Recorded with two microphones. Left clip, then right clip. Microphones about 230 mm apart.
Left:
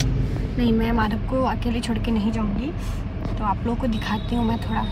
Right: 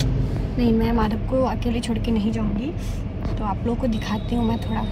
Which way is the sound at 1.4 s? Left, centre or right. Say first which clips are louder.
Right 1 dB; centre.